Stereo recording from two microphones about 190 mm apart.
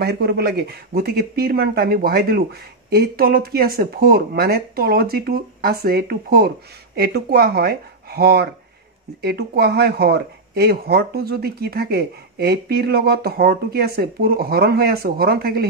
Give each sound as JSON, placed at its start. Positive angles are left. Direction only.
{"t": 0.0, "sound": "speech", "side_deg": -55}